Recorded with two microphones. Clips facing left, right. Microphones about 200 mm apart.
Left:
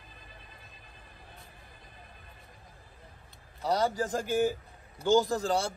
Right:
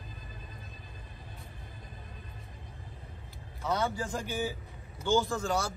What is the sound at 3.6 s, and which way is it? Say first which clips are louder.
Speech: left 3 dB; 35° left (ahead or behind).